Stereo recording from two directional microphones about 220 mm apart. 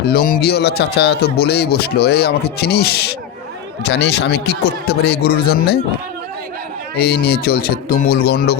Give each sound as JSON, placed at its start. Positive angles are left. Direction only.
{"t": 0.0, "sound": "speech", "side_deg": 45}
{"t": 7.0, "sound": "speech", "side_deg": 45}